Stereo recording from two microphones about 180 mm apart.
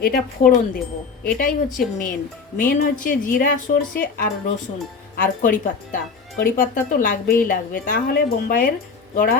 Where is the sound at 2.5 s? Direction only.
50° left (ahead or behind).